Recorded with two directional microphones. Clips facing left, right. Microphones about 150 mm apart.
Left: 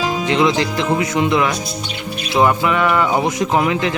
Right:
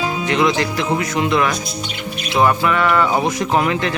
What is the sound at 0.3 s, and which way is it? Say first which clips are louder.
Speech: left 1 dB; 20° left (ahead or behind).